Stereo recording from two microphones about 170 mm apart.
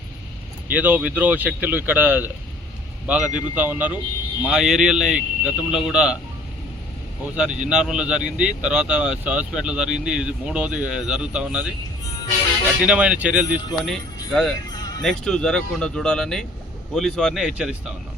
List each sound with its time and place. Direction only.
0.7 s speech: 10° right (ahead or behind)
7.3 s speech: 5° right (ahead or behind)
12.8 s speech: 5° right (ahead or behind)
13.8 s speech: 5° left (ahead or behind)
14.7 s music: 25° left (ahead or behind)
15.0 s speech: 5° left (ahead or behind)